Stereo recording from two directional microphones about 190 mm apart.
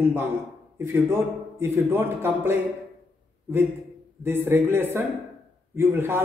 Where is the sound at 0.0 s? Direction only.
10° right (ahead or behind).